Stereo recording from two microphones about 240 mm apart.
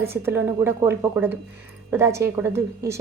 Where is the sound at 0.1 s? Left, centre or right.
Centre.